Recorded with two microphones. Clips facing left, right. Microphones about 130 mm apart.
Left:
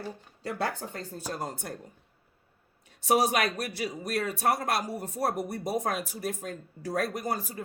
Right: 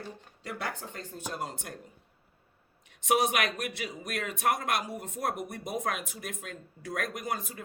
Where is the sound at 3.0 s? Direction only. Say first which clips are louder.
Left 2 dB; 35° left (ahead or behind).